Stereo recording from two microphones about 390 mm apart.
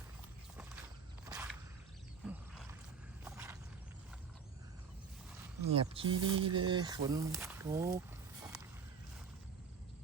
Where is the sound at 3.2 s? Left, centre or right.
Centre.